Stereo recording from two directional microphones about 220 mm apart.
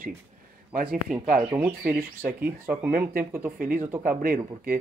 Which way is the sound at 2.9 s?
40° right (ahead or behind).